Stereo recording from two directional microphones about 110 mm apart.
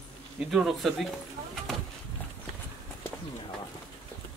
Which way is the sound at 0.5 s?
Centre (ahead or behind).